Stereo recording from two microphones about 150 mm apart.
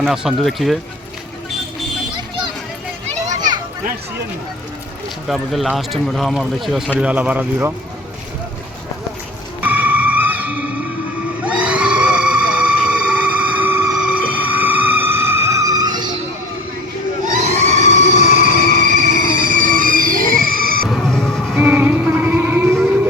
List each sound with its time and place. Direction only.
0.0 s speech: 5° right (ahead or behind)
5.3 s speech: centre (ahead or behind)
9.6 s music: 10° right (ahead or behind)
11.3 s a sound: 10° right (ahead or behind); by 16.1 s 25° right (ahead or behind)
17.4 s a sound: 50° right (ahead or behind)
18.2 s music: 60° left (ahead or behind)
18.7 s music: 60° right (ahead or behind); by 20.8 s 75° right (ahead or behind)
20.8 s music: 5° left (ahead or behind)
21.6 s music: 10° right (ahead or behind)